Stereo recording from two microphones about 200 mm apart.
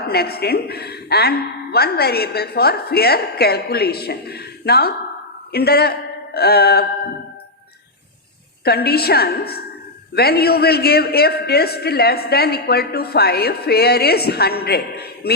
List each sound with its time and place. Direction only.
0.1 s a man's voice: 50° left (ahead or behind)
8.6 s a man's voice: 50° left (ahead or behind)